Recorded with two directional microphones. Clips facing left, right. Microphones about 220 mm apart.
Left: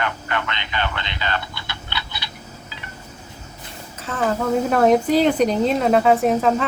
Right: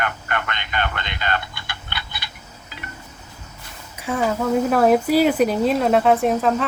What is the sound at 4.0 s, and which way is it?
Speech, 10° right (ahead or behind).